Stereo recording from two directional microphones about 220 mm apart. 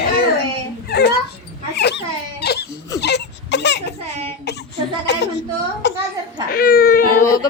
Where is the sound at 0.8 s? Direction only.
50° left (ahead or behind).